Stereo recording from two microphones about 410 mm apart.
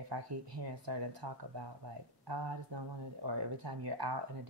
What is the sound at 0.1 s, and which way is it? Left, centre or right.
Speech, right.